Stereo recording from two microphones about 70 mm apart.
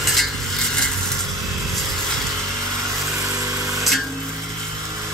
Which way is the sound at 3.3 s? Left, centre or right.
Right.